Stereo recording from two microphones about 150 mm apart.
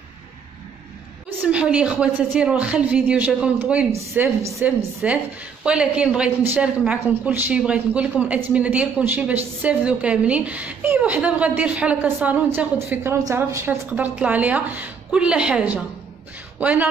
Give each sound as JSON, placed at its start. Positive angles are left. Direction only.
{"t": 1.4, "sound": "a woman's voice", "side_deg": -10}
{"t": 5.0, "sound": "a woman's voice", "side_deg": -5}